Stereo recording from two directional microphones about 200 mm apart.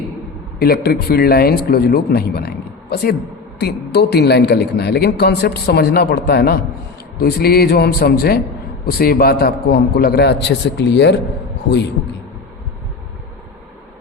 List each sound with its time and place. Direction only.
0.6 s a woman's voice: 50° left (ahead or behind)